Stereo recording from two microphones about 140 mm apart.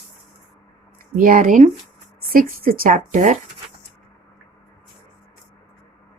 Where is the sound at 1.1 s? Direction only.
80° right.